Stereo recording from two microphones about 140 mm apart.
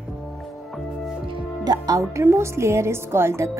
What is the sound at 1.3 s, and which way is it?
A woman's voice, 30° right (ahead or behind).